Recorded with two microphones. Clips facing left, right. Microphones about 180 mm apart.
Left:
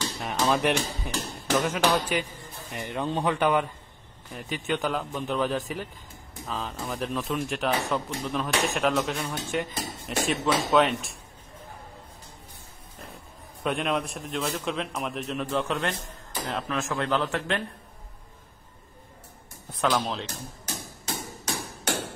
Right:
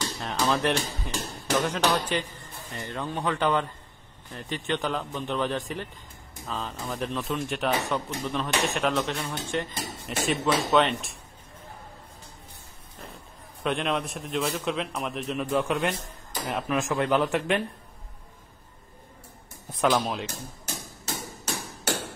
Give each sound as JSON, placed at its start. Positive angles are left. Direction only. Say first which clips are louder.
{"t": 0.2, "sound": "speech", "louder": "left 1 dB", "side_deg": 10}
{"t": 13.6, "sound": "speech", "louder": "even", "side_deg": 0}
{"t": 20.0, "sound": "speech", "louder": "right 1 dB", "side_deg": -10}